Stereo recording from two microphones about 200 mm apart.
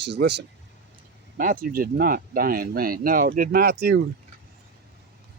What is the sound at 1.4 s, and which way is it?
Speech, 45° right (ahead or behind).